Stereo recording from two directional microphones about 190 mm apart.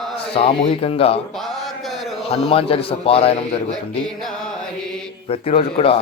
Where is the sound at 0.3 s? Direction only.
30° left (ahead or behind).